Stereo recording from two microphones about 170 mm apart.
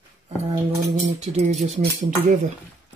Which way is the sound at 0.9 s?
40° right (ahead or behind).